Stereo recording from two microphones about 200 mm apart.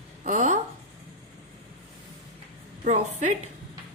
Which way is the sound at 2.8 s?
35° right (ahead or behind).